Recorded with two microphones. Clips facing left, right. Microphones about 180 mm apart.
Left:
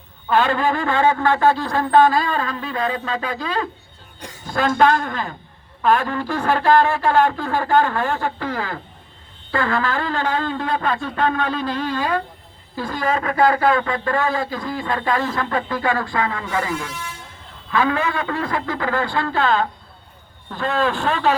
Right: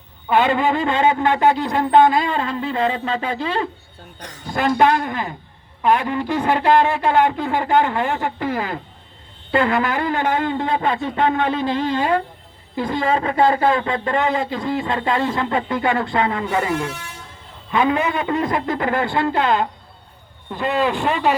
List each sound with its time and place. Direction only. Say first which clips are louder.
0.3 s speech: right 1 dB; 20° right (ahead or behind)
4.8 s speech: left 1 dB; 15° right (ahead or behind)